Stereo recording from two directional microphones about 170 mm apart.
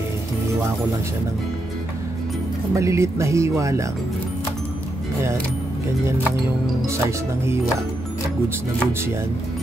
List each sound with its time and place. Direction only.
2.7 s speech: 15° right (ahead or behind)
6.9 s speech: 15° right (ahead or behind)